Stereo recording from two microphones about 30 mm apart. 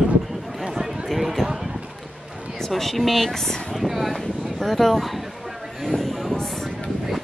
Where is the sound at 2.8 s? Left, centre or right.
Centre.